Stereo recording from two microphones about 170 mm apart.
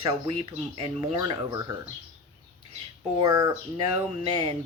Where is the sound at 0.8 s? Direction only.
35° right (ahead or behind).